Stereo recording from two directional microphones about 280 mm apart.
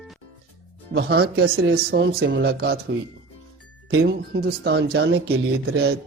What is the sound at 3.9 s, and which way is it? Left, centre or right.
Speech, right.